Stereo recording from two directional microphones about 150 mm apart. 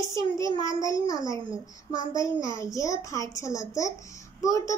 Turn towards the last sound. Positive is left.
turn(degrees=20)  # may be behind; listen again after turning